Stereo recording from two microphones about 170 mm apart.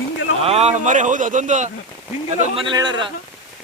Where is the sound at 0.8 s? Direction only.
45° right (ahead or behind).